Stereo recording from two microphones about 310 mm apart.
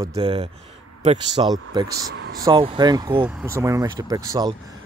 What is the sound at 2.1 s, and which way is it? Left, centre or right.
Speech, right.